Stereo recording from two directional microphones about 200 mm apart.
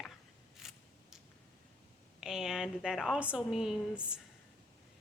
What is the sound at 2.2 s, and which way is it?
A woman's voice, 5° right (ahead or behind).